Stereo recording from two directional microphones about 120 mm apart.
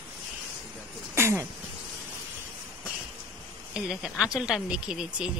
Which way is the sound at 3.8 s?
5° right (ahead or behind).